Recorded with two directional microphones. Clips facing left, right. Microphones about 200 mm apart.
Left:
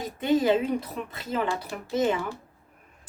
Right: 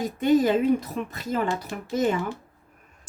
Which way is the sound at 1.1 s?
45° right (ahead or behind).